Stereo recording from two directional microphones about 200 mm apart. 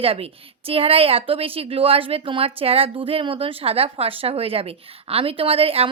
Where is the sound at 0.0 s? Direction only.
30° right (ahead or behind).